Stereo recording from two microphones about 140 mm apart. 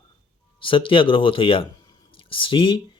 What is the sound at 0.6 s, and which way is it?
A man's voice, 40° left (ahead or behind).